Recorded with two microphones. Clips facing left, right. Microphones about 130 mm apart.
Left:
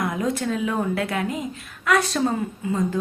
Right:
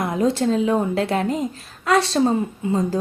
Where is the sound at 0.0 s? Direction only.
25° right (ahead or behind).